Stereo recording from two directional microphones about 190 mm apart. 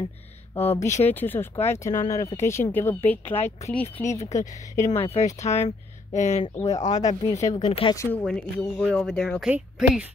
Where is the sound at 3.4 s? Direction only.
35° left (ahead or behind).